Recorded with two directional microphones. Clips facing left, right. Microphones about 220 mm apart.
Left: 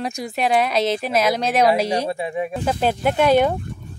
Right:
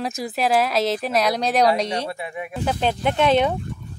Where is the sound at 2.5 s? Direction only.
5° left (ahead or behind).